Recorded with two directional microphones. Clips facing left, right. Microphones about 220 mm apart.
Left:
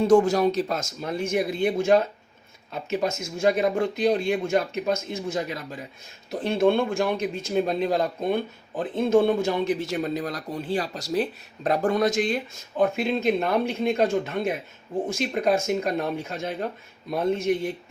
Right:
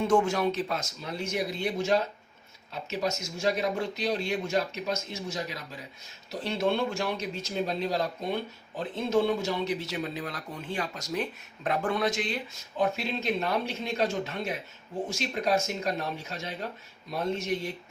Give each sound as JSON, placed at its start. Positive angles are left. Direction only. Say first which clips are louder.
{"t": 0.0, "sound": "speech", "louder": "left 6 dB", "side_deg": 35}